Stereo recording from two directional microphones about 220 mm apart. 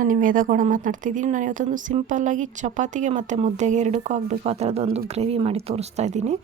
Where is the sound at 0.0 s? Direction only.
40° right (ahead or behind).